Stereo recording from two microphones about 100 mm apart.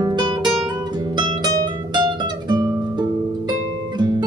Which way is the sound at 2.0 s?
50° right (ahead or behind).